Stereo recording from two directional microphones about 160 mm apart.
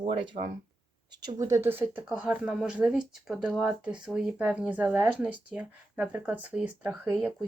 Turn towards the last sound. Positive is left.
turn(degrees=-10)  # may be behind; listen again after turning